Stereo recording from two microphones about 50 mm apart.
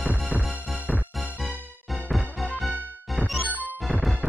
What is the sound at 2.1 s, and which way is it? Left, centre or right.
Music, centre.